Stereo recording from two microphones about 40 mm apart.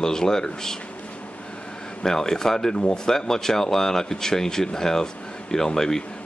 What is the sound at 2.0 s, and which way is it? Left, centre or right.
Speech, centre.